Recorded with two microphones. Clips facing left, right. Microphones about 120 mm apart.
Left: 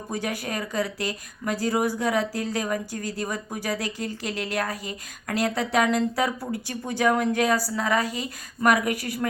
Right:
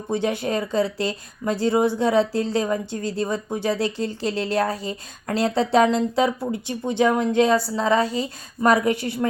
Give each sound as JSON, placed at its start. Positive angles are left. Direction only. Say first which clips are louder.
{"t": 0.1, "sound": "speech", "louder": "right 7 dB", "side_deg": -25}